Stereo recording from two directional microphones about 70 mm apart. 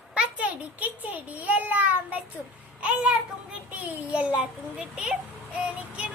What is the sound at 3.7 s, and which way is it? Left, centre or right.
Child singing, right.